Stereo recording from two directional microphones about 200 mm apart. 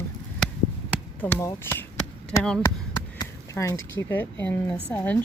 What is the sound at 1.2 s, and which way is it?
Chop, 10° left (ahead or behind).